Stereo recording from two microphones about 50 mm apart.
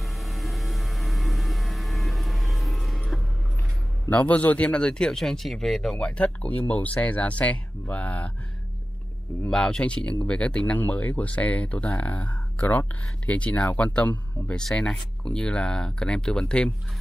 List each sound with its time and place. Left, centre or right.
0.0 s vehicle: centre
4.1 s speech: left; by 5.9 s centre
5.9 s speech: left
9.5 s speech: centre
14.5 s speech: centre